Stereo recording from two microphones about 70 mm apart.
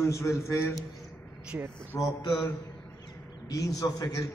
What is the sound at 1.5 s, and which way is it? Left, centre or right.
Speech, right.